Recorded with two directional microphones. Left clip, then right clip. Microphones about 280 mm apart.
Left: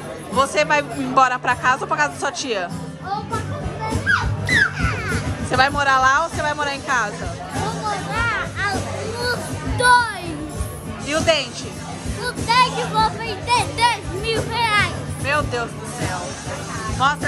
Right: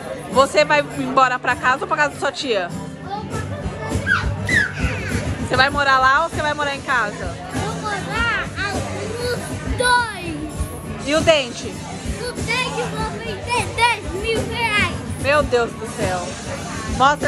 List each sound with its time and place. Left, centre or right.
0.4 s speech: centre
4.6 s music: centre
5.5 s speech: centre
8.1 s music: centre
9.8 s music: centre
11.1 s speech: centre
12.4 s speech: centre
13.5 s children playing: centre
17.0 s speech: centre